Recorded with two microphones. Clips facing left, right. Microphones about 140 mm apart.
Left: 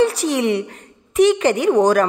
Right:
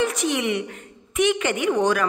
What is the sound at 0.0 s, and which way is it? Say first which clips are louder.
A woman's voice: left 6 dB; 35° left (ahead or behind).